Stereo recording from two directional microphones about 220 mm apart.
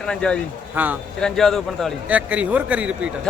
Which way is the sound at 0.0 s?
5° left (ahead or behind).